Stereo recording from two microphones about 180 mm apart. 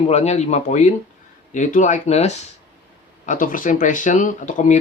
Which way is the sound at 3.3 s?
50° left (ahead or behind).